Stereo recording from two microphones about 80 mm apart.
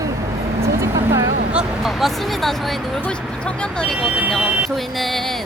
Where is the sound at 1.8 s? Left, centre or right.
Centre.